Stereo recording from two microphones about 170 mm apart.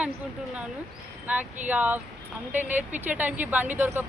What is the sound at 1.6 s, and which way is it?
Speech, 10° right (ahead or behind).